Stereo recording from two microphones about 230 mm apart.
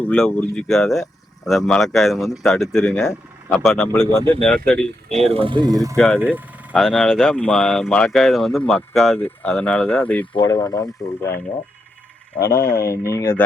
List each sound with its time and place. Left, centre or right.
0.0 s speech: centre
5.1 s speech: right; by 10.2 s centre
10.3 s speech: centre
12.4 s speech: left
12.6 s speech: centre